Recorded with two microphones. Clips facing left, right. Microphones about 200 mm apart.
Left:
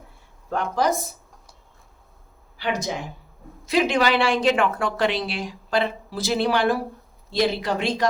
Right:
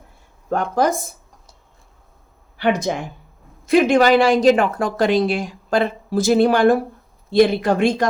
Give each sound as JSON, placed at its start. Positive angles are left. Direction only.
{"t": 0.5, "sound": "speech", "side_deg": -50}
{"t": 2.6, "sound": "speech", "side_deg": -55}